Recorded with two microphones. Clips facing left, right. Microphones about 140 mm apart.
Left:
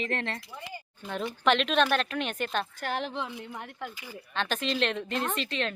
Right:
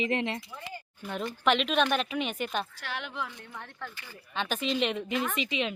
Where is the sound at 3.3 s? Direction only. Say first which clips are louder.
Left 5 dB; 15° left (ahead or behind).